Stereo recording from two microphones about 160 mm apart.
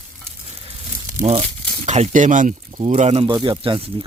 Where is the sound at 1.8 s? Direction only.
45° right (ahead or behind).